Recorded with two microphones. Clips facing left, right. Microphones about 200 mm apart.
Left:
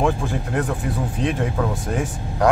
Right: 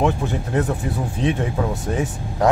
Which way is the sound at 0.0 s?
20° right (ahead or behind).